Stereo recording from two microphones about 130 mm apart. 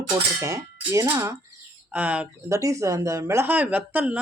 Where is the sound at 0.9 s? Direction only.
20° right (ahead or behind).